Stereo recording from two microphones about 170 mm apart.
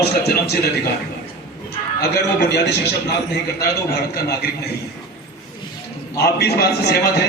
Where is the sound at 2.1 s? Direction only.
80° left.